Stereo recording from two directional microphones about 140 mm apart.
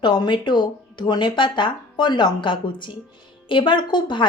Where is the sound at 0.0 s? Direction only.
35° left (ahead or behind).